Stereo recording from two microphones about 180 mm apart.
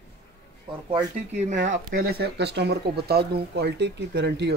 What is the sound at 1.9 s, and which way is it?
Speech, 60° right (ahead or behind).